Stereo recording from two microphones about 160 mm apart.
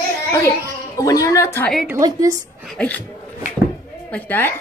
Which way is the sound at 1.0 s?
20° left (ahead or behind).